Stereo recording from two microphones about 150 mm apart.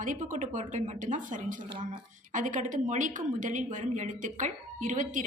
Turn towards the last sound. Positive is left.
turn(degrees=-60)  # may be behind; listen again after turning